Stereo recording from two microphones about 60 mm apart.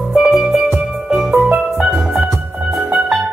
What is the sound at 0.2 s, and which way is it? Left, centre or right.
Music, centre.